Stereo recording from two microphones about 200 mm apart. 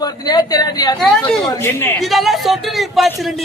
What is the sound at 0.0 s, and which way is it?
A man's voice, 20° left (ahead or behind).